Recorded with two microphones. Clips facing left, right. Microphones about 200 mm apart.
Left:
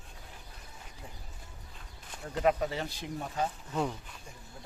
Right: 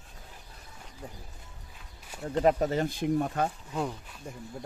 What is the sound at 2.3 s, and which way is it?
Speech, 35° right (ahead or behind).